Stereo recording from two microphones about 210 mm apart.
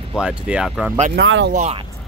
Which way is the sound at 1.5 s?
30° right (ahead or behind).